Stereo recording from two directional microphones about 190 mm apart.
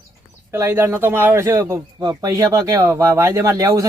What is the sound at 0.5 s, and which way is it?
A man's voice, 10° right (ahead or behind).